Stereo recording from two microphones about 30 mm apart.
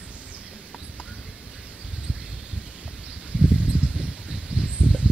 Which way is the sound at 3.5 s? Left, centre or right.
Right.